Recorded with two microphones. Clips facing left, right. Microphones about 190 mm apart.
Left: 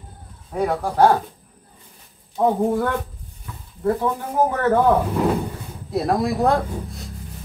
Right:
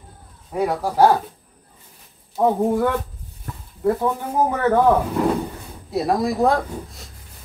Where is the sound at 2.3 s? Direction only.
5° right (ahead or behind).